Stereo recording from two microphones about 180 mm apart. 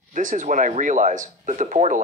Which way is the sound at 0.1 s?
45° right (ahead or behind).